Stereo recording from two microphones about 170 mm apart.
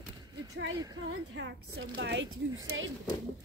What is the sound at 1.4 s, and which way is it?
Speech, 90° right.